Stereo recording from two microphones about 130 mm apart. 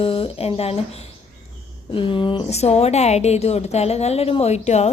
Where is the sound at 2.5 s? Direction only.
55° left (ahead or behind).